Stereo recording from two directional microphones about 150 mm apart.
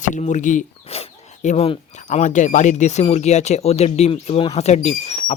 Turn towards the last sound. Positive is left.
turn(degrees=45)  # may be behind; listen again after turning